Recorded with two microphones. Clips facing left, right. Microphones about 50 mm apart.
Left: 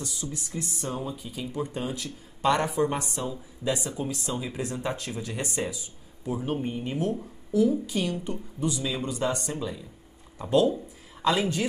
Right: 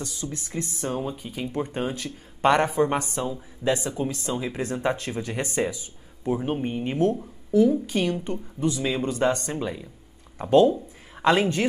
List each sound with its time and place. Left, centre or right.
0.2 s a woman's voice: right